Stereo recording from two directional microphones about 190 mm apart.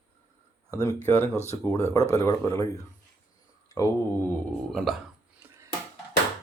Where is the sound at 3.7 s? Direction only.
15° left (ahead or behind).